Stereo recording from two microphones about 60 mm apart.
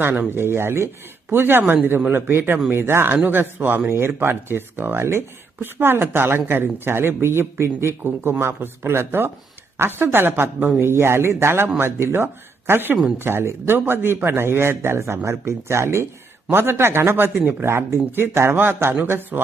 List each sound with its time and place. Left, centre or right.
0.0 s speech: right